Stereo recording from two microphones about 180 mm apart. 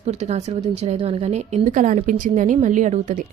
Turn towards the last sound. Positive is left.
turn(degrees=-45)  # may be behind; listen again after turning